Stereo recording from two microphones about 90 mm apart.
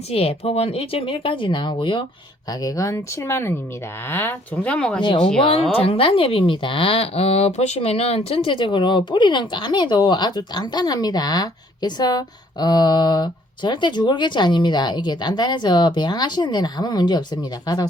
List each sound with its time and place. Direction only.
0.1 s speech: 90° left; by 2.0 s 65° left (ahead or behind)
2.5 s a woman's voice: 40° left (ahead or behind); by 5.0 s 10° left (ahead or behind)
5.0 s speech: 60° left (ahead or behind)
5.7 s speech: 90° left
8.3 s speech: 80° left; by 17.8 s 45° left (ahead or behind)